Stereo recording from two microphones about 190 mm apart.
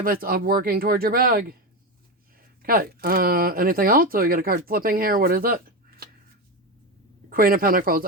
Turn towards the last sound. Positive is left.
turn(degrees=-50)  # may be behind; listen again after turning